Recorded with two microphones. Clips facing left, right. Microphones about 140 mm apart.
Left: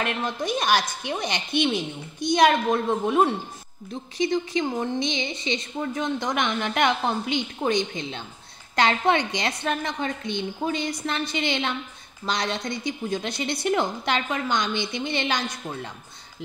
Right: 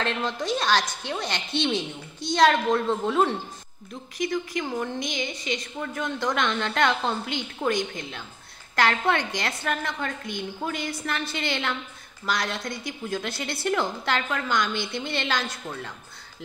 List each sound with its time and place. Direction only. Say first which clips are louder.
0.0 s a woman's voice: left 1 dB; 10° left (ahead or behind)